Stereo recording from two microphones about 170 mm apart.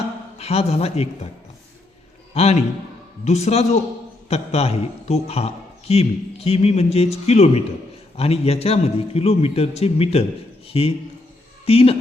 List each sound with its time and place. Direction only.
0.3 s a man's voice: 40° left (ahead or behind)
2.3 s a man's voice: 40° left (ahead or behind)